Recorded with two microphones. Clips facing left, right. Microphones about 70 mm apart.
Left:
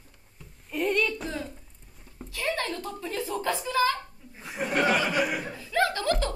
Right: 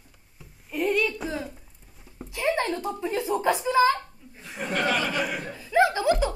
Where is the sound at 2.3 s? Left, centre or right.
Right.